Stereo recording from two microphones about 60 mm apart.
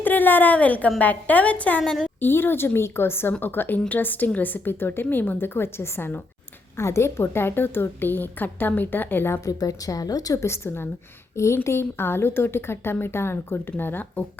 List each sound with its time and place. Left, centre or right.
0.0 s a sound: left
0.9 s a woman's voice: left
1.8 s a woman's voice: centre
2.2 s a woman's voice: left
6.7 s a woman's voice: left
9.5 s a woman's voice: left
10.4 s a woman's voice: left